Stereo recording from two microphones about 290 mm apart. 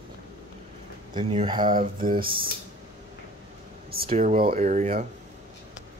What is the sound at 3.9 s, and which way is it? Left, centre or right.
Speech, right.